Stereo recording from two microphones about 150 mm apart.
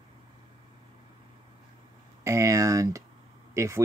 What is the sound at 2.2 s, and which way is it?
Speech, 20° right (ahead or behind).